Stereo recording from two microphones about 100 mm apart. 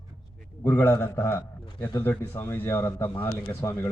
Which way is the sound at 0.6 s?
20° left (ahead or behind).